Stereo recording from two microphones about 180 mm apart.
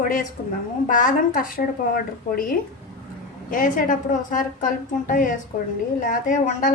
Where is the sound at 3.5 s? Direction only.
50° left (ahead or behind).